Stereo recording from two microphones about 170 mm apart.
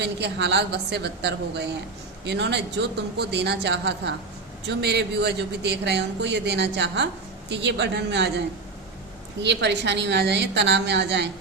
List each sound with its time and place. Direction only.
0.0 s a woman's voice: 85° right
9.4 s speech: 90° right